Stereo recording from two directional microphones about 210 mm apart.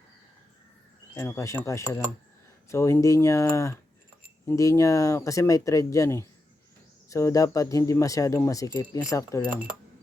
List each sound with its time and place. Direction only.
1.1 s speech: 15° left (ahead or behind)
9.5 s speech: 5° right (ahead or behind)